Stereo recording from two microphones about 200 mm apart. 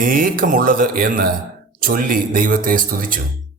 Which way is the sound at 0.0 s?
45° right (ahead or behind).